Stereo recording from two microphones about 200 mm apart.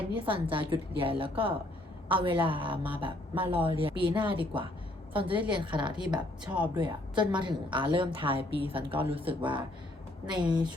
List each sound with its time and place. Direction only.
0.1 s a woman's voice: 25° right (ahead or behind)